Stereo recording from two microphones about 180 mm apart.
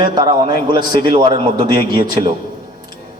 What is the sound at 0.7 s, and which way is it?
A man's voice, 25° right (ahead or behind).